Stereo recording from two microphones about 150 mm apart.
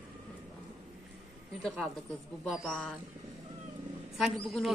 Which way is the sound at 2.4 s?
5° left (ahead or behind).